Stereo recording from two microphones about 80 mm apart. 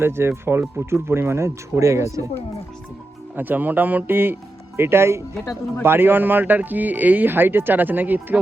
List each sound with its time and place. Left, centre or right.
0.0 s speech: right
3.3 s speech: right